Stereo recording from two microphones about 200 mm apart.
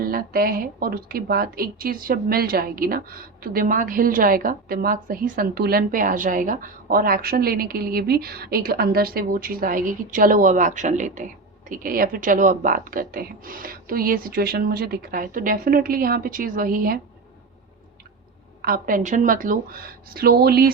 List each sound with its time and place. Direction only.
0.0 s a woman's voice: 45° right (ahead or behind)
18.6 s a woman's voice: 45° right (ahead or behind)